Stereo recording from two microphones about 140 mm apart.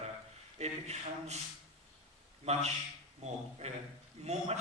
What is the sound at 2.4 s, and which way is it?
A man's voice, 50° right (ahead or behind).